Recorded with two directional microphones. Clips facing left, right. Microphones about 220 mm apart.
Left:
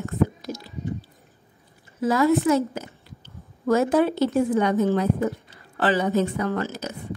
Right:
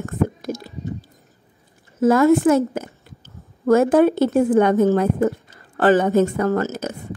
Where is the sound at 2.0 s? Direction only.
50° right (ahead or behind).